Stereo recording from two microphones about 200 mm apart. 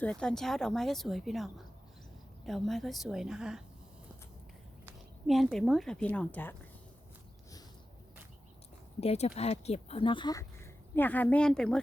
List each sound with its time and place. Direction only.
0.0 s speech: 5° left (ahead or behind)
5.2 s speech: centre (ahead or behind)
9.0 s speech: 30° left (ahead or behind); by 11.8 s 5° left (ahead or behind)